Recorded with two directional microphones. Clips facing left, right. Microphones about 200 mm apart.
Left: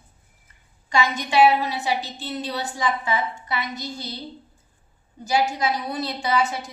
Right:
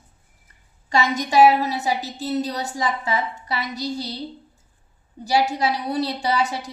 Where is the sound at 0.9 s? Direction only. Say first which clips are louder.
Right 2 dB; 40° right (ahead or behind).